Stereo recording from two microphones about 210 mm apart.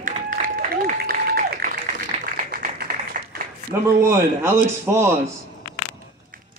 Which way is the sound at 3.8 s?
10° right (ahead or behind).